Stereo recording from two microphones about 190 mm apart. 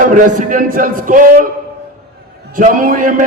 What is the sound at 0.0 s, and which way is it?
A man's voice, 45° right (ahead or behind).